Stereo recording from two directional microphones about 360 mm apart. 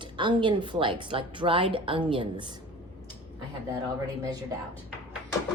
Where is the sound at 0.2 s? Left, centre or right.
Centre.